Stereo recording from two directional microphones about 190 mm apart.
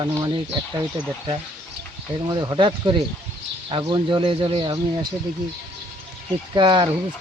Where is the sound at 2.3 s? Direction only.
25° right (ahead or behind).